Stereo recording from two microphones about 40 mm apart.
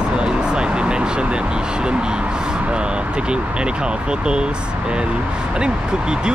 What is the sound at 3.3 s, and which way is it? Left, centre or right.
Speech, right.